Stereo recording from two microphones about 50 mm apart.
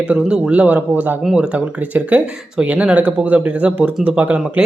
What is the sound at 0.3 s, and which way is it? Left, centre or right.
Speech, centre.